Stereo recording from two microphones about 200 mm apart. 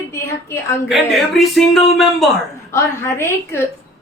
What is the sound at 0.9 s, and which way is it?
A man's voice, centre (ahead or behind).